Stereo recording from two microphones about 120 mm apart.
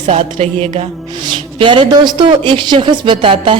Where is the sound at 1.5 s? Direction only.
45° right (ahead or behind).